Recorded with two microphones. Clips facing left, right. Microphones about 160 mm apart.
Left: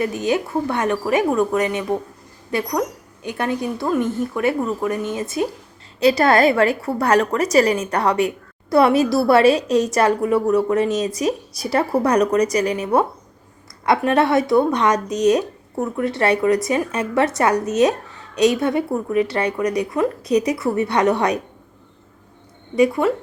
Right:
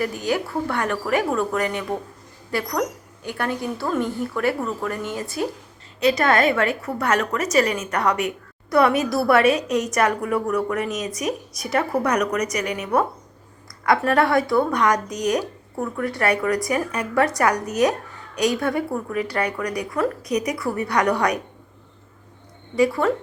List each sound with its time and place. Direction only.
0.0 s a woman's voice: 20° left (ahead or behind)
6.0 s a woman's voice: 35° left (ahead or behind)
22.7 s a woman's voice: 20° left (ahead or behind)